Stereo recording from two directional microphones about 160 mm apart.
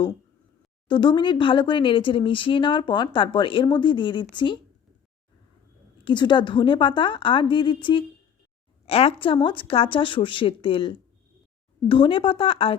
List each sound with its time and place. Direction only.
0.9 s speech: 30° left (ahead or behind)
6.1 s speech: 30° left (ahead or behind)